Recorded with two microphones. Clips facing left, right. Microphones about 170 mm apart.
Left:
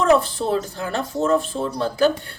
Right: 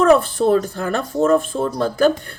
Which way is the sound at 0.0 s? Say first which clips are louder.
Right 4 dB; 55° right (ahead or behind).